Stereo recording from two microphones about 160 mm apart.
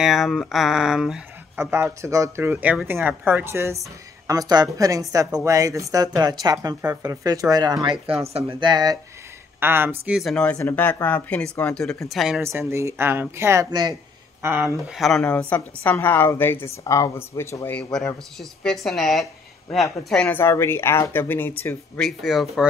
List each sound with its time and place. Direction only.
0.0 s speech: centre (ahead or behind)
1.6 s speech: 15° right (ahead or behind)
9.6 s a woman's voice: 15° right (ahead or behind)
12.4 s speech: 15° right (ahead or behind)
14.9 s a woman's voice: centre (ahead or behind)
18.4 s a woman's voice: centre (ahead or behind)